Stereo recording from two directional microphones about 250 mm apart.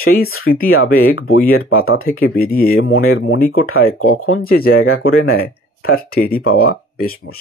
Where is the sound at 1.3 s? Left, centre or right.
Left.